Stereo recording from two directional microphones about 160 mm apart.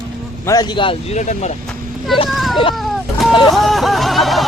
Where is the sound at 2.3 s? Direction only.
Centre (ahead or behind).